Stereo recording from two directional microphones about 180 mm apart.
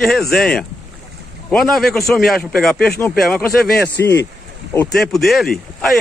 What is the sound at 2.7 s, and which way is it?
Speech, 60° left (ahead or behind).